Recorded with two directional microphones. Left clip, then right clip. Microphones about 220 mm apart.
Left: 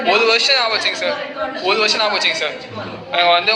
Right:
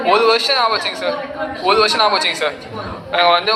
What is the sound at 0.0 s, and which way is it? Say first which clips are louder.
A man's voice: right 1 dB; 20° right (ahead or behind).